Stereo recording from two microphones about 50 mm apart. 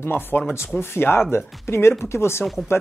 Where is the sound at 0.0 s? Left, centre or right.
Left.